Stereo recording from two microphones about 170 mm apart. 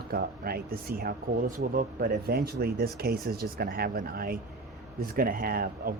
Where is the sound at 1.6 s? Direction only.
50° right (ahead or behind).